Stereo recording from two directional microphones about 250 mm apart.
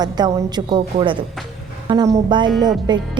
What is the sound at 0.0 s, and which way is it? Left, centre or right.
A woman's voice, centre.